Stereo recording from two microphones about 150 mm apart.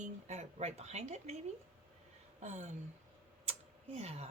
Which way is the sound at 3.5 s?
45° right (ahead or behind).